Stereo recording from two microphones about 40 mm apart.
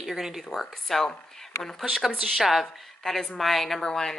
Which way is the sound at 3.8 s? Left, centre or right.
Centre.